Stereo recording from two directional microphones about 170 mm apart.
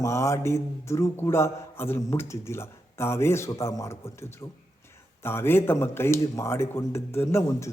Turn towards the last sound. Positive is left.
turn(degrees=15)  # may be behind; listen again after turning